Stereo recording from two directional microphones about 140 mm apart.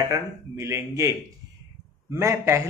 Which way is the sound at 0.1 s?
20° right (ahead or behind).